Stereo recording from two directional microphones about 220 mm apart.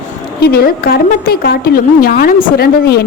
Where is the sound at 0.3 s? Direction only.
45° left (ahead or behind).